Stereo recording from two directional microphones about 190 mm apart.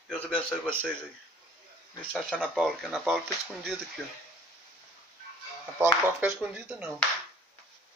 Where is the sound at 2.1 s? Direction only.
5° left (ahead or behind).